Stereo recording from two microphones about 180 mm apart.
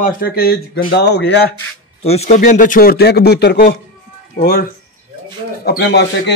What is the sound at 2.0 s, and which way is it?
A man's voice, 35° left (ahead or behind).